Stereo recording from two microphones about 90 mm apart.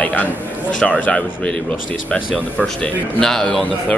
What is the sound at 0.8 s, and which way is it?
Speech, 15° left (ahead or behind).